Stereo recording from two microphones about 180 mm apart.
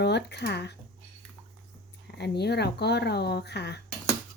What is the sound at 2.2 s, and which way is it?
Speech, 65° left (ahead or behind).